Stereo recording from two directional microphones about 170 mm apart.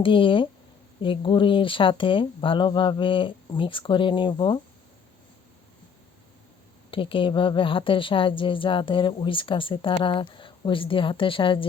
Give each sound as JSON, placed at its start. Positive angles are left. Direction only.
{"t": 0.0, "sound": "a woman's voice", "side_deg": 30}
{"t": 6.9, "sound": "a woman's voice", "side_deg": 30}